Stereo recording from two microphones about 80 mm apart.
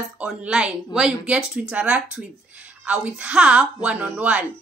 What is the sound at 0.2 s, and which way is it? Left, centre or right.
Speech, centre.